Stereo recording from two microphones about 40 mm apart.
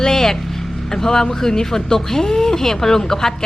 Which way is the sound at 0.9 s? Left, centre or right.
Centre.